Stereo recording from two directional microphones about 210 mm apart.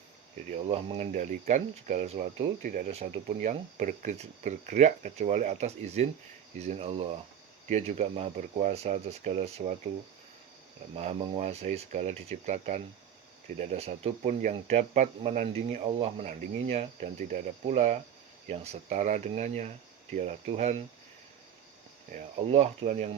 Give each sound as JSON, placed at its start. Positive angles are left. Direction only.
{"t": 0.5, "sound": "speech", "side_deg": -30}
{"t": 10.9, "sound": "speech", "side_deg": -30}
{"t": 22.1, "sound": "speech", "side_deg": -30}